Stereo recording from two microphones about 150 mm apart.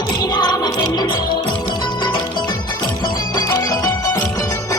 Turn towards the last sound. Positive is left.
turn(degrees=20)  # may be behind; listen again after turning